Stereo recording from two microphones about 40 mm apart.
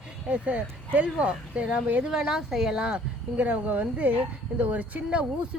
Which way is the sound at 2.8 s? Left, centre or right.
Right.